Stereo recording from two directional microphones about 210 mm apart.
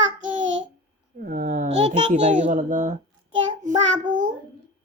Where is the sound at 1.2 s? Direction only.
40° right (ahead or behind).